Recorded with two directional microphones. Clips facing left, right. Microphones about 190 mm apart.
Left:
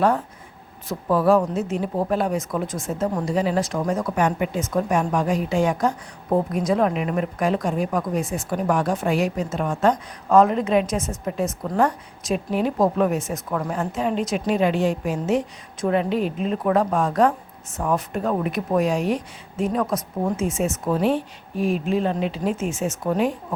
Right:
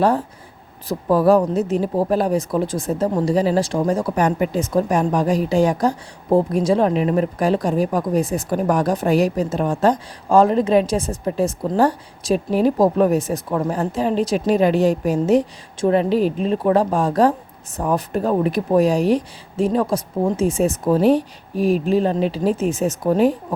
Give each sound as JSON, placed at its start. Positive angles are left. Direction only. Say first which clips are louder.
{"t": 0.9, "sound": "speech", "louder": "right 3 dB", "side_deg": -35}